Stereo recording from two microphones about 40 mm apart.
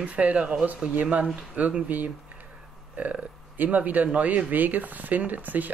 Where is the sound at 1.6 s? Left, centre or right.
Right.